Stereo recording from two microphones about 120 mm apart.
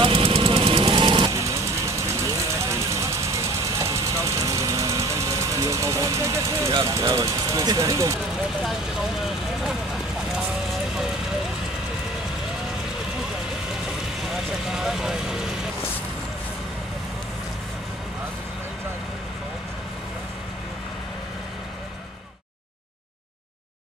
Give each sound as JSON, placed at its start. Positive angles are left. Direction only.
{"t": 0.0, "sound": "vehicle", "side_deg": -55}
{"t": 1.3, "sound": "vehicle", "side_deg": -25}
{"t": 6.9, "sound": "speech", "side_deg": -30}
{"t": 14.3, "sound": "vehicle", "side_deg": -5}